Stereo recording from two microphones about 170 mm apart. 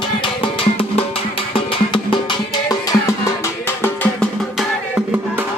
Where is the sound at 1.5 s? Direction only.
30° left (ahead or behind).